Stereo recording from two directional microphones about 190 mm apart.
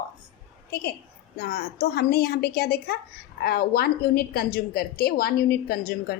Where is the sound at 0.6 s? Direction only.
55° left (ahead or behind).